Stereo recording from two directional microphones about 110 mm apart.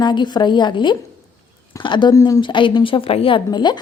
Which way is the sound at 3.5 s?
40° left (ahead or behind).